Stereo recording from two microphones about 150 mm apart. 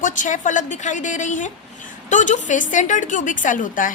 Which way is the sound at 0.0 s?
60° left (ahead or behind).